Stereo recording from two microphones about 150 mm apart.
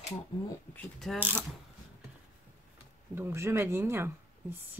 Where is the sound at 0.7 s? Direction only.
Centre (ahead or behind).